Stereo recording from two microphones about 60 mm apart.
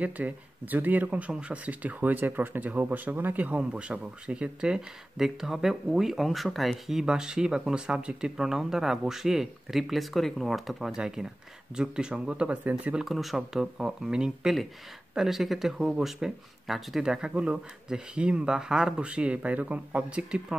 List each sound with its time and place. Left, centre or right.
0.0 s speech: right
12.9 s speech: centre